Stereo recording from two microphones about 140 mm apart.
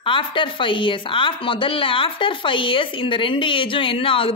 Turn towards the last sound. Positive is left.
turn(degrees=40)  # may be behind; listen again after turning